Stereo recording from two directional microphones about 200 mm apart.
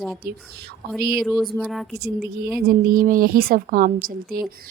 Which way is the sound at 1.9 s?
55° right (ahead or behind).